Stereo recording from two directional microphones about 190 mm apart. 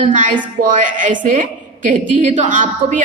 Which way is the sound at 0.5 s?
45° right (ahead or behind).